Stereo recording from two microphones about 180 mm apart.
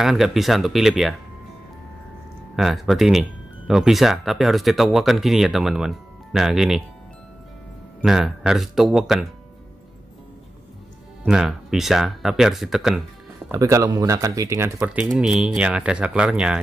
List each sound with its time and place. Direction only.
0.0 s speech: centre (ahead or behind)
2.5 s speech: centre (ahead or behind)
8.0 s speech: 5° right (ahead or behind)
11.2 s speech: centre (ahead or behind)
13.5 s speech: 15° right (ahead or behind)
15.1 s speech: 5° right (ahead or behind)